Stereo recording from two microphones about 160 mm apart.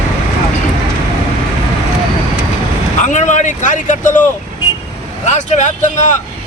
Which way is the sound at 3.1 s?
50° left (ahead or behind).